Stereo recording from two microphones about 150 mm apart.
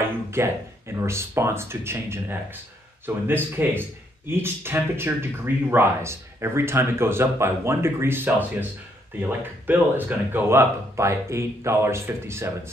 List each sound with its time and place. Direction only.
0.3 s speech: 15° right (ahead or behind)